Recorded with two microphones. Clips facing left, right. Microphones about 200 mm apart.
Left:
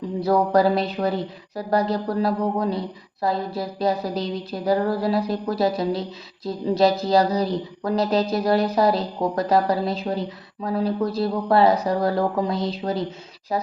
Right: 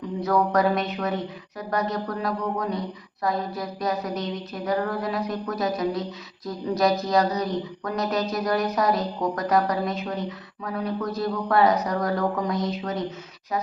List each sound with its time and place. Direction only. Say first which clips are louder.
0.2 s speech: left 3 dB; 30° left (ahead or behind)